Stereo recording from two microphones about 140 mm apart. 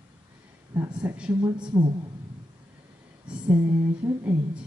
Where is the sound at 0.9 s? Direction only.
10° right (ahead or behind).